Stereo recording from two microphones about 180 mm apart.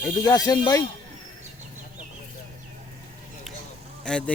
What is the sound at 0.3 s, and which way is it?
Speech, 20° left (ahead or behind).